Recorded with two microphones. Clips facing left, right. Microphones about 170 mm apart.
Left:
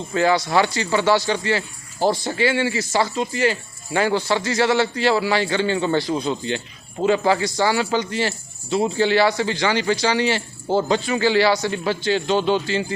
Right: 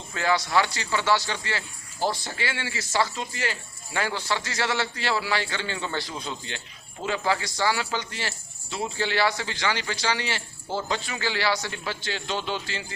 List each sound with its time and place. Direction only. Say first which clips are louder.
0.1 s speech: left 6 dB; 25° left (ahead or behind)
2.0 s speech: left 8 dB; 50° left (ahead or behind)
2.4 s speech: left 12 dB; 20° left (ahead or behind)
6.1 s speech: left 12 dB; 35° left (ahead or behind)
7.0 s speech: left 9 dB; 25° left (ahead or behind)